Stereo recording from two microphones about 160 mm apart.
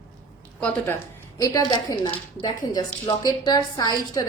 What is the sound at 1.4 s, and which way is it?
A woman's voice, 20° left (ahead or behind).